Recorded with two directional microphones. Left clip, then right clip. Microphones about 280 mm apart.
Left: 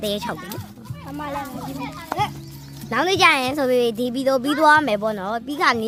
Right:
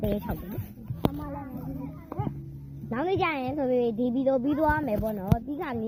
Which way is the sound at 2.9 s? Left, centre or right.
Centre.